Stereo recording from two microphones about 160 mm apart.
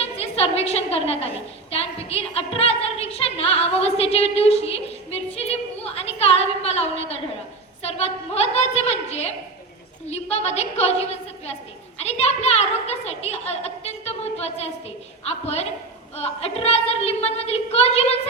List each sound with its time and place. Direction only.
0.0 s a woman's voice: 40° left (ahead or behind)
1.7 s a sound: 40° left (ahead or behind)
7.8 s a woman's voice: 40° left (ahead or behind)